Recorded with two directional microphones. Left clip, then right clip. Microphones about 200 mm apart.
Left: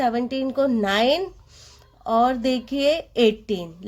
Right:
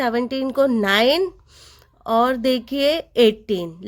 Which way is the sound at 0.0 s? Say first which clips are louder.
Right 1 dB; 30° right (ahead or behind).